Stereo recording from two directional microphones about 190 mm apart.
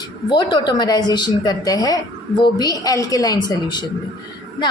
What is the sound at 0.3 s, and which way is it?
A woman's voice, 25° left (ahead or behind).